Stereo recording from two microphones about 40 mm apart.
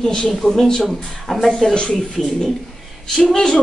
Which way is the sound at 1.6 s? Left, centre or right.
Left.